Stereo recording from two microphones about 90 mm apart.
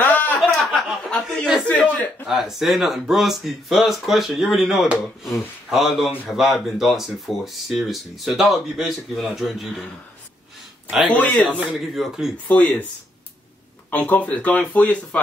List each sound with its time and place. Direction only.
0.0 s a sound: 20° left (ahead or behind)
0.4 s chuckle: centre (ahead or behind)
1.6 s a sound: 15° left (ahead or behind)
2.2 s speech: 5° right (ahead or behind)
11.1 s speech: 15° left (ahead or behind)
11.7 s speech: centre (ahead or behind)
12.4 s speech: 20° left (ahead or behind)
13.8 s speech: 20° left (ahead or behind)